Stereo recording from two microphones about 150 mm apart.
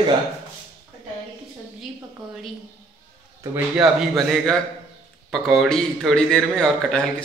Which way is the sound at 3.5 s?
5° right (ahead or behind).